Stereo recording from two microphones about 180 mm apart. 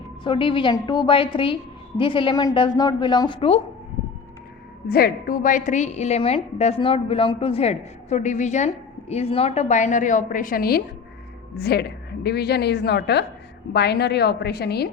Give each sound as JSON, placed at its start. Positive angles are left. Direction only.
{"t": 0.3, "sound": "a woman's voice", "side_deg": 30}
{"t": 4.9, "sound": "a woman's voice", "side_deg": 60}